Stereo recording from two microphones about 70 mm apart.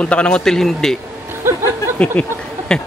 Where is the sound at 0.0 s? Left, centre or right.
Centre.